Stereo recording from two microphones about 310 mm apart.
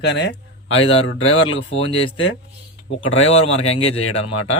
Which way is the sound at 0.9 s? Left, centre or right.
Centre.